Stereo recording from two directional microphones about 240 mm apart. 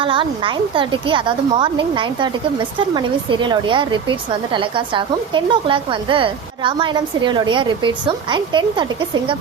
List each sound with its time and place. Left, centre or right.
0.0 s speech: right